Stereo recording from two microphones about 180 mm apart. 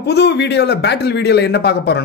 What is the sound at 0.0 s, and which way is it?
A man's voice, 70° left (ahead or behind).